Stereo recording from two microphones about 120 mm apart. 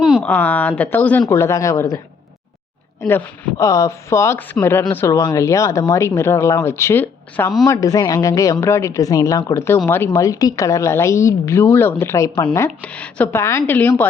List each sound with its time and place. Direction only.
0.0 s a sound: centre (ahead or behind)
0.3 s a woman's voice: 15° left (ahead or behind)
3.6 s speech: 25° left (ahead or behind)
7.7 s speech: 30° left (ahead or behind)
12.8 s a woman's voice: 10° left (ahead or behind)